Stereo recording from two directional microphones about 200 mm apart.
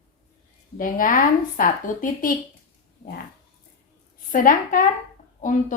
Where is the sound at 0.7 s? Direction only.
45° left (ahead or behind).